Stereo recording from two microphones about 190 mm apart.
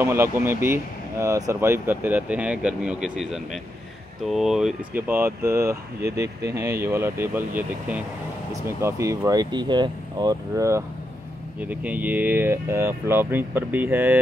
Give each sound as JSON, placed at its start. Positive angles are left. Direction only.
{"t": 0.0, "sound": "speech", "side_deg": -15}